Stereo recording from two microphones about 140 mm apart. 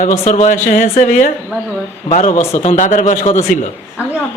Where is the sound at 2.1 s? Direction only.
55° left (ahead or behind).